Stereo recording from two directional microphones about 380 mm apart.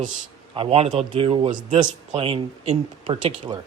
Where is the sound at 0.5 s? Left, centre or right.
Centre.